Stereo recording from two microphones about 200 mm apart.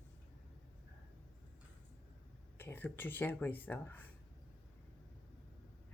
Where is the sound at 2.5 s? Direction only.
10° left (ahead or behind).